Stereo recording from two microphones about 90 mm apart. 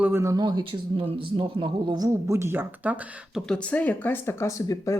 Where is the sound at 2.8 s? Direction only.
15° right (ahead or behind).